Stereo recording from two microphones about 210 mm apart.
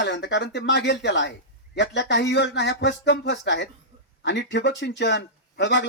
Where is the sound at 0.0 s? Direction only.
55° left (ahead or behind).